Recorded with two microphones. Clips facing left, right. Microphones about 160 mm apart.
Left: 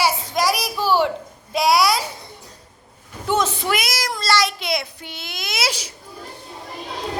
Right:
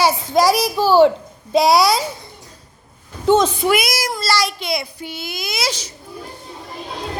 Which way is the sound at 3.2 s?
20° right (ahead or behind).